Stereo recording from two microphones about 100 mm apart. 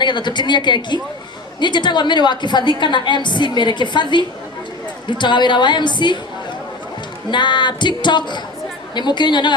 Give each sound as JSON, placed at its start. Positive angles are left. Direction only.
{"t": 0.0, "sound": "a woman's voice", "side_deg": 50}
{"t": 7.3, "sound": "a woman's voice", "side_deg": 50}